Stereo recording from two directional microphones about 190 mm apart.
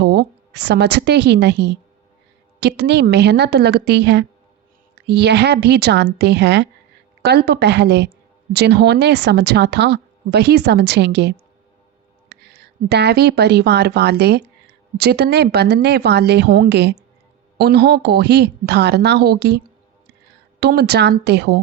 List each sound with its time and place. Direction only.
0.0 s a woman's voice: 60° right (ahead or behind)